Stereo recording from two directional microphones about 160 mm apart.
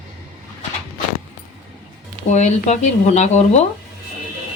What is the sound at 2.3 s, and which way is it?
Speech, 45° left (ahead or behind).